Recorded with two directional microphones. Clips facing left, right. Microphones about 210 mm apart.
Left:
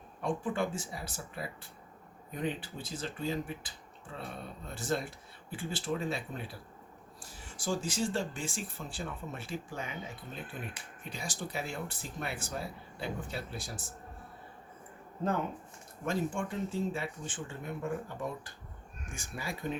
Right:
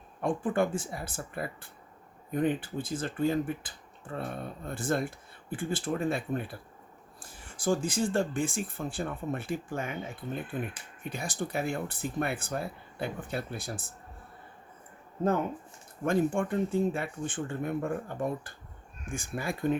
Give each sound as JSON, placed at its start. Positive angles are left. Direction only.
{"t": 0.2, "sound": "speech", "side_deg": -55}
{"t": 16.0, "sound": "speech", "side_deg": -55}